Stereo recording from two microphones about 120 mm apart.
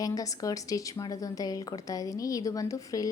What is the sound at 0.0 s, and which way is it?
A woman's voice, 30° left (ahead or behind).